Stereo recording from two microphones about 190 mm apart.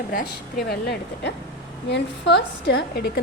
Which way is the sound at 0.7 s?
60° left (ahead or behind).